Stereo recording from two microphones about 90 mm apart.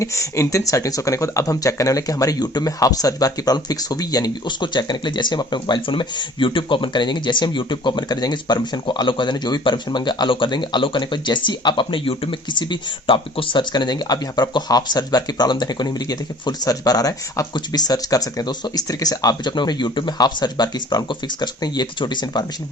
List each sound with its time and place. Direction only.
0.0 s speech: 35° left (ahead or behind); by 22.4 s 55° left (ahead or behind)